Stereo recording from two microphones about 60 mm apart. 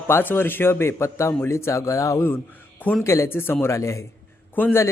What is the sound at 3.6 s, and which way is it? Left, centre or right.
Speech, left.